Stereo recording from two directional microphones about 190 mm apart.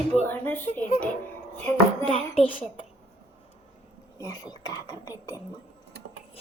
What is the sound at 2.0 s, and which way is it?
Speech, 30° left (ahead or behind).